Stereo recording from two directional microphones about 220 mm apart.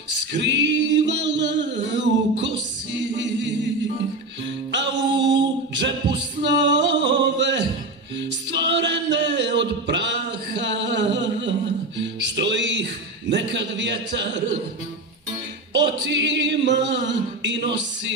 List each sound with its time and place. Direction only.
0.3 s singing: 55° right (ahead or behind)
2.4 s music: 55° right (ahead or behind)
5.2 s singing: 55° right (ahead or behind)
6.4 s a sound: 55° right (ahead or behind)
12.0 s music: 55° right (ahead or behind)
13.3 s a sound: 55° right (ahead or behind)
15.7 s singing: 55° right (ahead or behind)